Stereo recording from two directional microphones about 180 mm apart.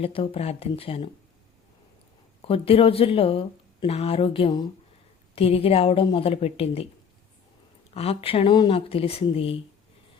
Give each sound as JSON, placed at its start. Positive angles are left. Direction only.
{"t": 0.0, "sound": "a woman's voice", "side_deg": 30}
{"t": 2.4, "sound": "a woman's voice", "side_deg": 30}
{"t": 7.9, "sound": "a woman's voice", "side_deg": 35}